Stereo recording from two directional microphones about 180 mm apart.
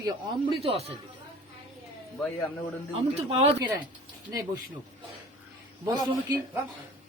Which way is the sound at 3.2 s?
35° right (ahead or behind).